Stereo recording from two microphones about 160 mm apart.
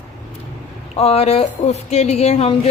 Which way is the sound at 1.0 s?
40° left (ahead or behind).